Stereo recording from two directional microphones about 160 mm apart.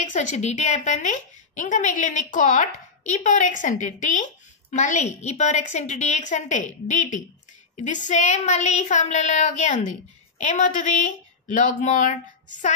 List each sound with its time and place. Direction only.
0.1 s a woman's voice: 50° left (ahead or behind)